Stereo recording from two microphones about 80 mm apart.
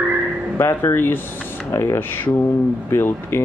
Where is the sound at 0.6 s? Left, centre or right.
Left.